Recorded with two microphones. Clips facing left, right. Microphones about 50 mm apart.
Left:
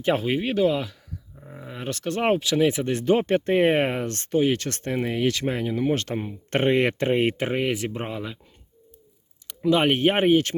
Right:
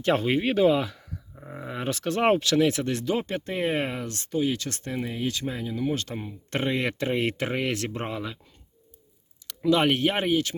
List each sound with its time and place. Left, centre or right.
0.0 s speech: centre
1.4 s speech: centre
1.6 s speech: centre
2.6 s speech: left
3.0 s speech: left
6.1 s speech: left; by 8.4 s centre
9.6 s speech: left